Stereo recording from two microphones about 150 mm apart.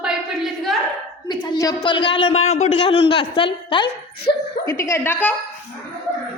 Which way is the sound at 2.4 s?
50° left (ahead or behind).